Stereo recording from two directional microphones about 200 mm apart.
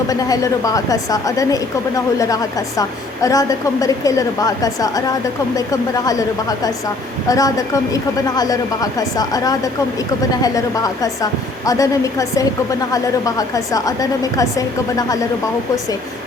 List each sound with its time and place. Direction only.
0.1 s a woman's voice: 15° left (ahead or behind)